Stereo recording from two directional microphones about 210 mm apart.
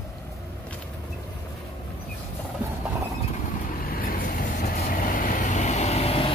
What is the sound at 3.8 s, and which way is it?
Vehicle, 45° left (ahead or behind).